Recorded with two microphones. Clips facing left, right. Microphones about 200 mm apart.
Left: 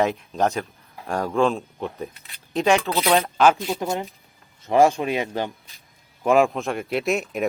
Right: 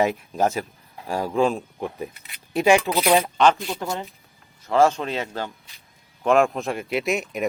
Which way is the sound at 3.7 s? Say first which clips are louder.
Left 3 dB; 15° left (ahead or behind).